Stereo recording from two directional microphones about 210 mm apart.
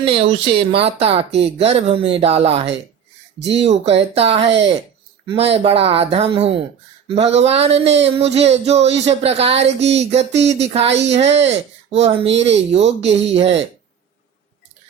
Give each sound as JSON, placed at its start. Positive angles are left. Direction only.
{"t": 0.0, "sound": "speech", "side_deg": -25}
{"t": 10.8, "sound": "a woman's voice", "side_deg": -55}
{"t": 11.1, "sound": "speech", "side_deg": -30}